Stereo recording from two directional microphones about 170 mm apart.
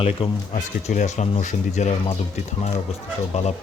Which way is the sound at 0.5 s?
45° left (ahead or behind).